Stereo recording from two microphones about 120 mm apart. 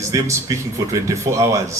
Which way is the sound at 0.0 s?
25° right (ahead or behind).